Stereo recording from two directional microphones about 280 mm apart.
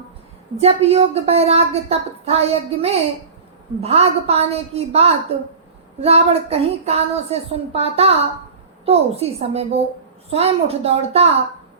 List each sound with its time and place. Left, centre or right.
0.6 s a woman's voice: right